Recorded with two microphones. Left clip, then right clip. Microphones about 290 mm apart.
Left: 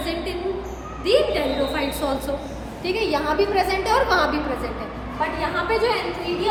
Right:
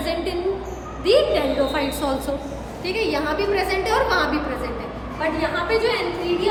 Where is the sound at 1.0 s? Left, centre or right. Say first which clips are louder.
Right 2 dB; centre.